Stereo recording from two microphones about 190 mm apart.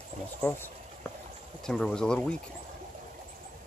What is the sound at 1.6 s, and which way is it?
Speech, 5° left (ahead or behind).